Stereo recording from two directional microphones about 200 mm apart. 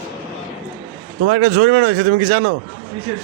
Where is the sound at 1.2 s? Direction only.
65° right (ahead or behind).